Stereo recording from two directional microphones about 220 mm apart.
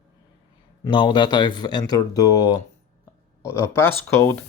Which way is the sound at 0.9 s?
20° left (ahead or behind).